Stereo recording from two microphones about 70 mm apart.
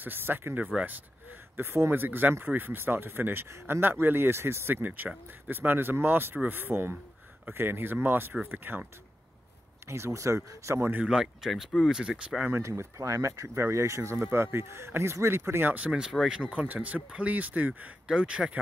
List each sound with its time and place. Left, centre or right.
0.0 s speech: right
4.8 s speech: right
9.8 s speech: right
10.9 s speech: centre
12.5 s speech: right
15.7 s speech: centre
16.1 s speech: centre
16.3 s speech: right